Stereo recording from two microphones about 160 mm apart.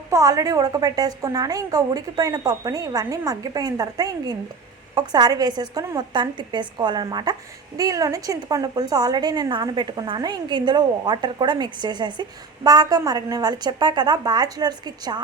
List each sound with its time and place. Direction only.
0.1 s a woman's voice: 20° right (ahead or behind)